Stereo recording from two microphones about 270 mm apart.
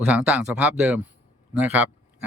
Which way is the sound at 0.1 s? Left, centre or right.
Centre.